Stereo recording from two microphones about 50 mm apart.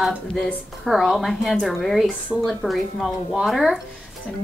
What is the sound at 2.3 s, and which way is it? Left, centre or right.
Speech, centre.